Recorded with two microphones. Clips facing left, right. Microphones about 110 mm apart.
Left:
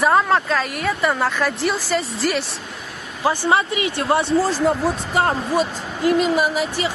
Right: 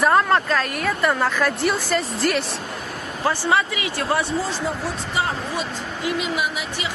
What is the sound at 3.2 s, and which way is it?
Speech, 25° left (ahead or behind).